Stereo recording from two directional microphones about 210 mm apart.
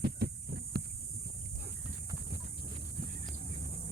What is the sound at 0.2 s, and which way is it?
Heart sounds, 50° right (ahead or behind).